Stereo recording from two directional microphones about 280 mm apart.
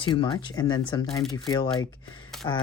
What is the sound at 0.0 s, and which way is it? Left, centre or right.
Speech, centre.